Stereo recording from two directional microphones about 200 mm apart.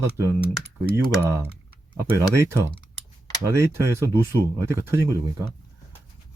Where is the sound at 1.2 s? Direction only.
15° right (ahead or behind).